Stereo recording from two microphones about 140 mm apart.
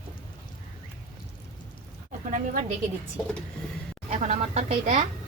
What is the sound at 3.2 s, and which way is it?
Speech, 10° left (ahead or behind).